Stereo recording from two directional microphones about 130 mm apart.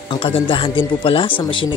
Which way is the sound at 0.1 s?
40° left (ahead or behind).